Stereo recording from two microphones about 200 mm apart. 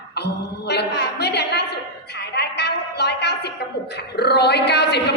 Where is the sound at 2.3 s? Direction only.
55° left (ahead or behind).